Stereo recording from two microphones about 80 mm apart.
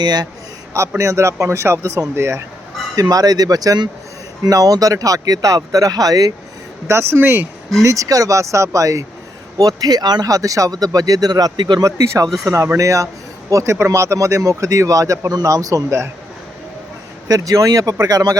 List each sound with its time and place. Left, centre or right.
0.0 s a man's voice: right
0.7 s speech: right
2.9 s speech: right
6.8 s speech: right
7.8 s speech: right
11.8 s speech: right
17.2 s speech: right